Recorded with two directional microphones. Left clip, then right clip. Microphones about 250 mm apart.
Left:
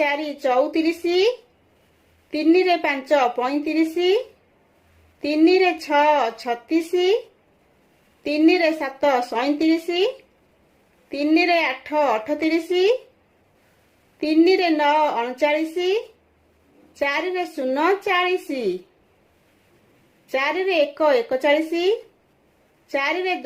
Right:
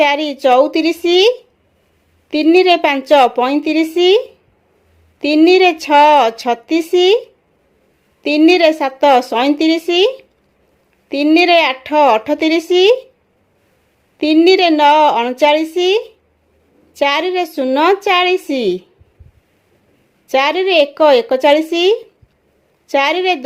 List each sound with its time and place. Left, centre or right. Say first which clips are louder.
0.0 s a woman's voice: right 9 dB; right
2.3 s a woman's voice: right 8 dB; right
5.2 s a woman's voice: right 8 dB; right
8.2 s a woman's voice: right 8 dB; right
14.2 s a woman's voice: right 7 dB; right
20.2 s a woman's voice: right 8 dB; right